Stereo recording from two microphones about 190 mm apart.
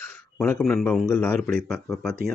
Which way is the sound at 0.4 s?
5° left (ahead or behind).